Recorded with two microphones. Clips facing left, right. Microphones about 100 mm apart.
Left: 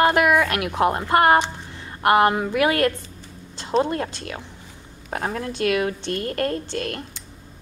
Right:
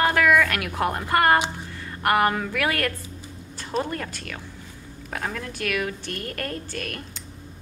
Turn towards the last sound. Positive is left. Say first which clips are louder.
# left 5 dB
turn(degrees=25)  # may be behind; listen again after turning